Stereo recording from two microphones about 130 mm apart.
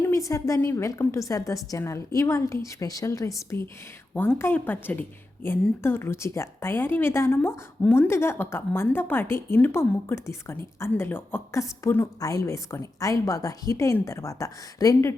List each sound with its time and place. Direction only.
0.0 s a woman's voice: 25° left (ahead or behind)